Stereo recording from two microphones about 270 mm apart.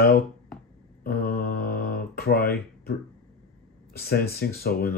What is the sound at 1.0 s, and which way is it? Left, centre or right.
Mantra, left.